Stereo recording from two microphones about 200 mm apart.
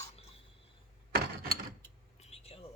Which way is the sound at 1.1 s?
50° right (ahead or behind).